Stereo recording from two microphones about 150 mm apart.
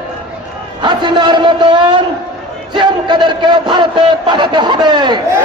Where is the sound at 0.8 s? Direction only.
30° right (ahead or behind).